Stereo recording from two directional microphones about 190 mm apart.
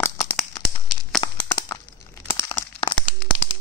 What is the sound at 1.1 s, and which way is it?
Tearing, 20° left (ahead or behind).